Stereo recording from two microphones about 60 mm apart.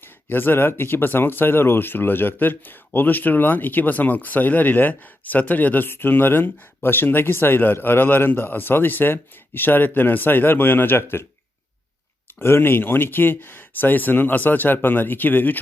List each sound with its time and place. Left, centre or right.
0.0 s speech: left
12.4 s speech: left